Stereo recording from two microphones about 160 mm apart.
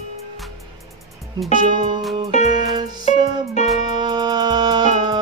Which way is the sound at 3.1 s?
45° left (ahead or behind).